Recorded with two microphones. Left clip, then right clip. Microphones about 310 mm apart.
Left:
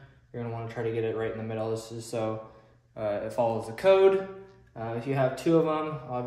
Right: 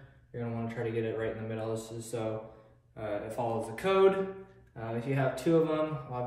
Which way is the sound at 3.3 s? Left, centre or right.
Left.